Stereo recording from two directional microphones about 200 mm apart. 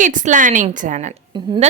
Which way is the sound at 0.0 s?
40° right (ahead or behind).